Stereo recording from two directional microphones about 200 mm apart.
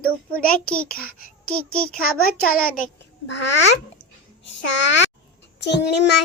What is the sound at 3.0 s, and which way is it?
Speech, 60° left (ahead or behind).